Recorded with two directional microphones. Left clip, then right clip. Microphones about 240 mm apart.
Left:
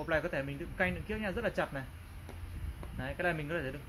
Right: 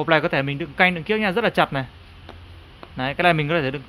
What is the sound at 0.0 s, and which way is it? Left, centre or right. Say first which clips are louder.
Speech: right 14 dB; right.